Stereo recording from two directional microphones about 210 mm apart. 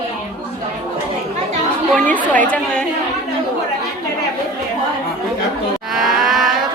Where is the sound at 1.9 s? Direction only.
5° left (ahead or behind).